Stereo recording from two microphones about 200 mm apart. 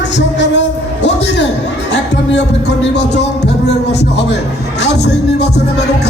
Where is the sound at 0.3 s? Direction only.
60° left (ahead or behind).